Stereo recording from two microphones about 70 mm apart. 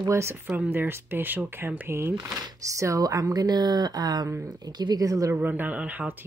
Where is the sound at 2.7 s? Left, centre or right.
Right.